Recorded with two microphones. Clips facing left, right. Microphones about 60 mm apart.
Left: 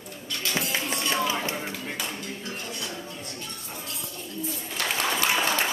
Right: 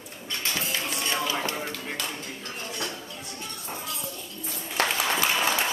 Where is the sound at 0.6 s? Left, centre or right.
Left.